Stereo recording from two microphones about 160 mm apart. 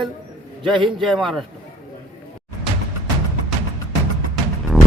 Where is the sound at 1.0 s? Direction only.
Centre (ahead or behind).